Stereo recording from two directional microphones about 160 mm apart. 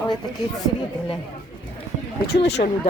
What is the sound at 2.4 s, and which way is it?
Speech, 90° left.